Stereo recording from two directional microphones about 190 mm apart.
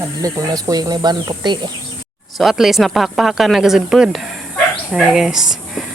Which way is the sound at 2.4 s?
Centre (ahead or behind).